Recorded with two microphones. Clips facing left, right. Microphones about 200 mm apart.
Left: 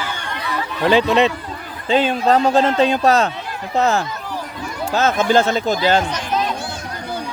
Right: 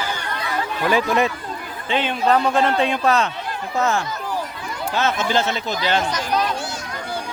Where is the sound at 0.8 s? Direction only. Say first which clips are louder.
Left 5 dB; 25° left (ahead or behind).